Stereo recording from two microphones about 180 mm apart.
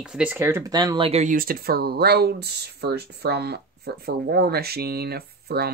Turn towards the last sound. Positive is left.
turn(degrees=-60)  # may be behind; listen again after turning